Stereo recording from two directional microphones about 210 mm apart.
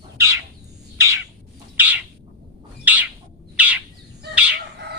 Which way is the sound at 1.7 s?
10° right (ahead or behind).